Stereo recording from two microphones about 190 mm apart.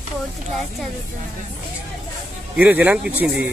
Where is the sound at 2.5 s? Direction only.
10° right (ahead or behind).